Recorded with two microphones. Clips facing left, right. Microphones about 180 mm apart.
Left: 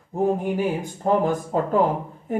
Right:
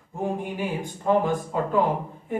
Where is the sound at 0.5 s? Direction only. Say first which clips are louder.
Left 5 dB; 40° left (ahead or behind).